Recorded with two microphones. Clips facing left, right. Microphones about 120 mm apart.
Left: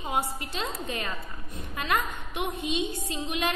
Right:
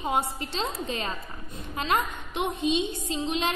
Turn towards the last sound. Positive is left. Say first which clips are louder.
# right 2 dB
turn(degrees=-25)  # may be behind; listen again after turning